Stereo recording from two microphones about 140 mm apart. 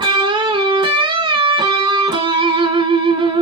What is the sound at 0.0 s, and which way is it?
Music, 35° right (ahead or behind).